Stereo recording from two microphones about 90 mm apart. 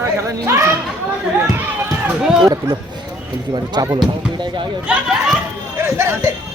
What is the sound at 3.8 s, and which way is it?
Speech, 45° right (ahead or behind).